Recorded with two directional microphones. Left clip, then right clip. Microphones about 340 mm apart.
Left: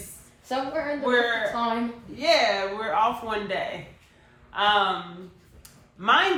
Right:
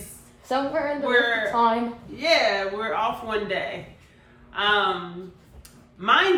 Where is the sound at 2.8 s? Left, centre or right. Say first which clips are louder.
Left 2 dB; centre.